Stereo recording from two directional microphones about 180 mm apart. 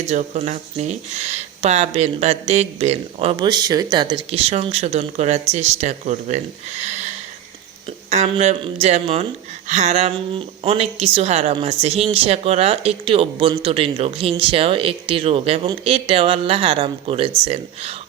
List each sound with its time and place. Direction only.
0.1 s a woman's voice: 40° right (ahead or behind)
8.1 s a woman's voice: 35° right (ahead or behind)